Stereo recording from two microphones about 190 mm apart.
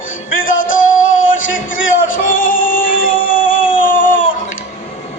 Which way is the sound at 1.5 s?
45° left (ahead or behind).